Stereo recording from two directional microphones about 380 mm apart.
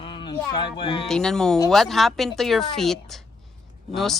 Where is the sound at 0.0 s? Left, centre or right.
Centre.